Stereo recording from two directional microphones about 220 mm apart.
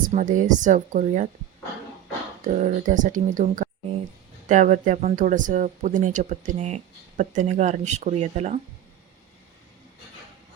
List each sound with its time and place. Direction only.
0.1 s speech: 35° right (ahead or behind)
2.5 s speech: 35° right (ahead or behind)